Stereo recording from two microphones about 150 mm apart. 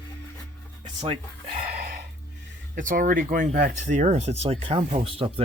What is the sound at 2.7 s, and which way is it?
Speech, 65° right (ahead or behind).